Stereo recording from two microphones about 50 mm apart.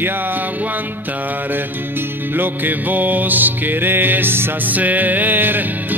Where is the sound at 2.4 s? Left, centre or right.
Right.